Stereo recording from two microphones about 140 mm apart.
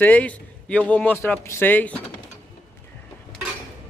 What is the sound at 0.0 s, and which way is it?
A man's voice, 10° left (ahead or behind).